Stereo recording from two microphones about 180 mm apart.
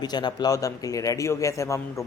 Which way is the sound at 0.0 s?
25° left (ahead or behind).